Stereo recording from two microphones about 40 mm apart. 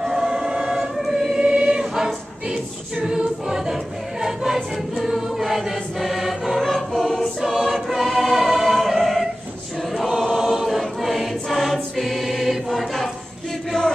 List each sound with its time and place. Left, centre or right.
0.0 s choir: centre
0.5 s choir: right
0.7 s choir: centre
2.0 s choir: centre
6.6 s choir: centre
7.3 s choir: centre
13.7 s chant: centre